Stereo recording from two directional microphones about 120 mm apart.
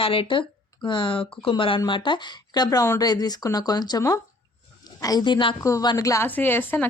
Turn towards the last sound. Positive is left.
turn(degrees=15)  # may be behind; listen again after turning